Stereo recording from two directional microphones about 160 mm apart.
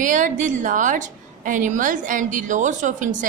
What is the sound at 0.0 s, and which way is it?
A man's voice, 55° right (ahead or behind).